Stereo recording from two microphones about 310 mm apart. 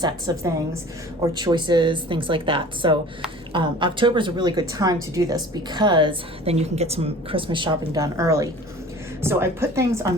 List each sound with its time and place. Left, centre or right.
0.0 s a woman's voice: centre